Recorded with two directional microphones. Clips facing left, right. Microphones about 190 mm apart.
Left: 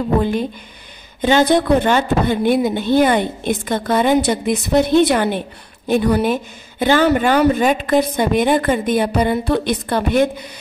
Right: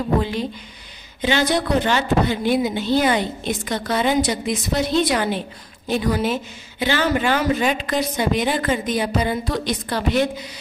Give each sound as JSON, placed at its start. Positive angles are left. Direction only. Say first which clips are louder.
{"t": 0.2, "sound": "speech", "louder": "left 5 dB", "side_deg": 50}